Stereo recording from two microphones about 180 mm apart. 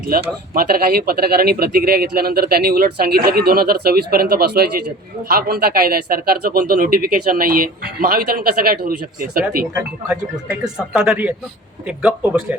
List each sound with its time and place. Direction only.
0.5 s speech: 55° right (ahead or behind)
9.7 s speech: 5° right (ahead or behind)